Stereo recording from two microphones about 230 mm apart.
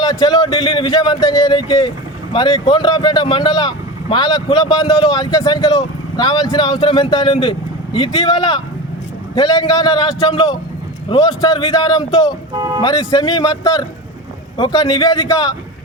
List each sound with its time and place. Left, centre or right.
0.0 s speech: centre